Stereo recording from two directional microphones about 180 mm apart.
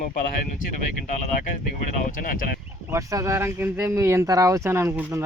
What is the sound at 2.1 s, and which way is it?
Speech, 50° left (ahead or behind).